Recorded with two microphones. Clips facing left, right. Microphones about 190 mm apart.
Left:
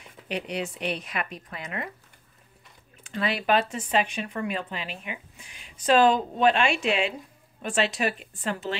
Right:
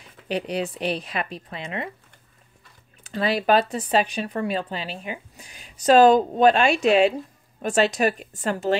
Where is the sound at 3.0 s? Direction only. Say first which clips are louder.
Right 5 dB; 35° right (ahead or behind).